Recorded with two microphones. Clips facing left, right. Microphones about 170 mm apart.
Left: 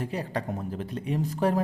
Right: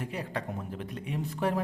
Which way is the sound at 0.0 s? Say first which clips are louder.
Left 4 dB; 35° left (ahead or behind).